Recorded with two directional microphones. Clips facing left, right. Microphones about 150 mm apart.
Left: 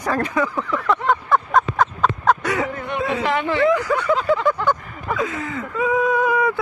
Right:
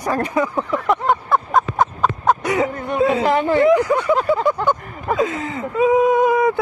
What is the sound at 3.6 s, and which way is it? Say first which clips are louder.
Speech: right 1 dB; 20° right (ahead or behind).